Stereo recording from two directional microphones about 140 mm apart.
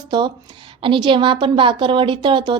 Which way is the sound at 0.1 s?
30° right (ahead or behind).